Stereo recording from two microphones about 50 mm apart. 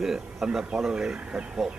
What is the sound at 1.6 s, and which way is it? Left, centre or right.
Speech, centre.